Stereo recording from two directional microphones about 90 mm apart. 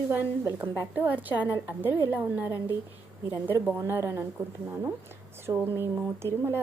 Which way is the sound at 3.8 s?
25° right (ahead or behind).